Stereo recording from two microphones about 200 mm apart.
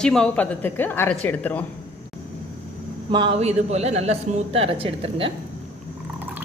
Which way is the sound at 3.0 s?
25° right (ahead or behind).